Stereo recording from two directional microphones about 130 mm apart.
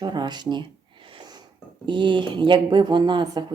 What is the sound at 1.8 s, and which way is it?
Speech, 40° right (ahead or behind).